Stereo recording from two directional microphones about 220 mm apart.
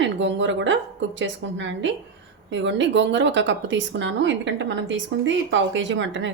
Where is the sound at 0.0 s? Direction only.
55° right (ahead or behind).